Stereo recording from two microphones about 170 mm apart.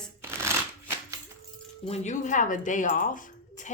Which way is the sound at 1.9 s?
45° left (ahead or behind).